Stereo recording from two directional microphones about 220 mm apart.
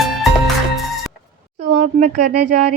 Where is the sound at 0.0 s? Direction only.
Centre (ahead or behind).